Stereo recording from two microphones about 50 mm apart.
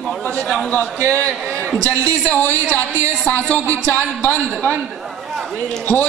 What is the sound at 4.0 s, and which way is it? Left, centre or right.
Speech, left.